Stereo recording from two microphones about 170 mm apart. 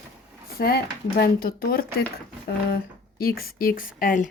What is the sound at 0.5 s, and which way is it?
Speech, 65° left (ahead or behind).